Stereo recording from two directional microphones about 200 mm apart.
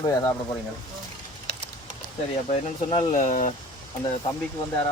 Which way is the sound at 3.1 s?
40° left (ahead or behind).